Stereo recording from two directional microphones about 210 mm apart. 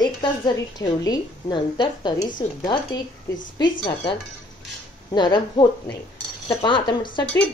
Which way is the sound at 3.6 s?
20° left (ahead or behind).